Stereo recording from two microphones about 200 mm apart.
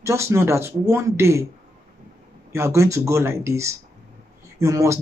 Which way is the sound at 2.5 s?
15° right (ahead or behind).